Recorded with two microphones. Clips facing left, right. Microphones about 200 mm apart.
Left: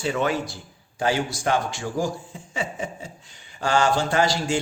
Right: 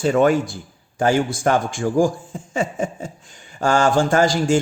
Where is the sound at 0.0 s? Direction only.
50° right (ahead or behind).